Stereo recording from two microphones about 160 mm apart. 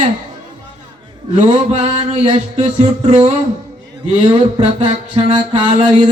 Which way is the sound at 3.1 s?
40° right (ahead or behind).